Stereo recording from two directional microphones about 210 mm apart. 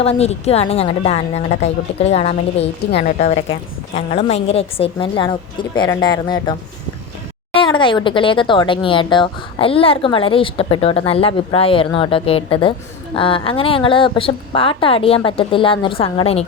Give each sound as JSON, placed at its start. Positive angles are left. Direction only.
{"t": 0.0, "sound": "speech", "side_deg": 30}
{"t": 7.5, "sound": "speech", "side_deg": 25}